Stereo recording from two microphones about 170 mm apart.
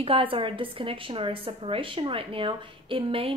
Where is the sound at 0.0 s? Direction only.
35° right (ahead or behind).